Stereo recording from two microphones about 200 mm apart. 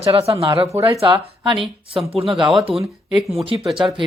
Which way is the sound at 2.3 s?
Centre (ahead or behind).